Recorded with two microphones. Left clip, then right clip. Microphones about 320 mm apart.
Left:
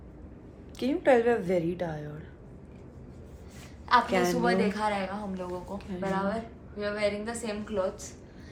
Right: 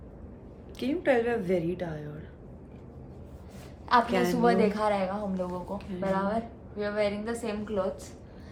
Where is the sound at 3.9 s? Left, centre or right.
Centre.